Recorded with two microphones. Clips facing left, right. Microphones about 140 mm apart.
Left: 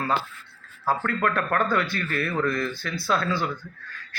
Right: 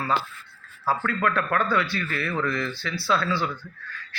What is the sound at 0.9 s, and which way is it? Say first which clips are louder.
Speech: even; 45° left (ahead or behind).